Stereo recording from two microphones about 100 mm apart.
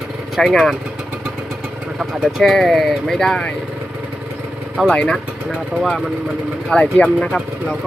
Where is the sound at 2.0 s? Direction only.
5° right (ahead or behind).